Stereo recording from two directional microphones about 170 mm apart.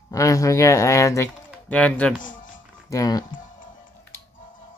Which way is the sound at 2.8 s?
20° left (ahead or behind).